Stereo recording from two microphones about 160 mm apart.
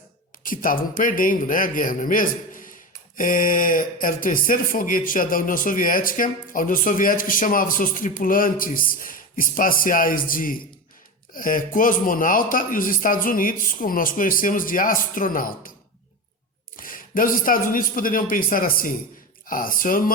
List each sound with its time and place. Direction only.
0.4 s speech: 60° left (ahead or behind)
16.7 s speech: 60° left (ahead or behind)